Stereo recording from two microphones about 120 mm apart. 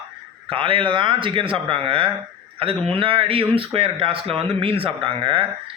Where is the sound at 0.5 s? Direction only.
45° right (ahead or behind).